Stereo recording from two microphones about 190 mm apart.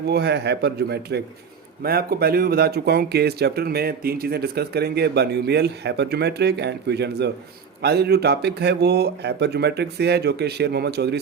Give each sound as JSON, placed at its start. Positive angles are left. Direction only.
{"t": 0.1, "sound": "speech", "side_deg": -60}